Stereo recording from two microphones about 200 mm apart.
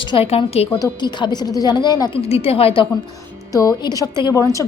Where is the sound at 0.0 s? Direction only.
25° left (ahead or behind).